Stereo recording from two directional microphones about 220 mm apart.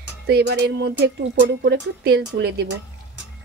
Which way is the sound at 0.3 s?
50° right (ahead or behind).